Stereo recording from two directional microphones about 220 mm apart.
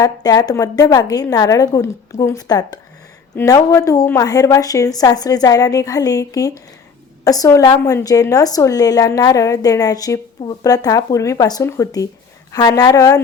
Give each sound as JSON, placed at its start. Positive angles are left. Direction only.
{"t": 0.0, "sound": "a woman's voice", "side_deg": 15}